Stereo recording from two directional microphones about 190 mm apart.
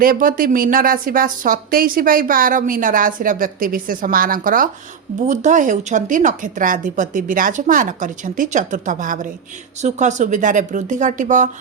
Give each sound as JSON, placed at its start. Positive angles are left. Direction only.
{"t": 0.0, "sound": "speech", "side_deg": -50}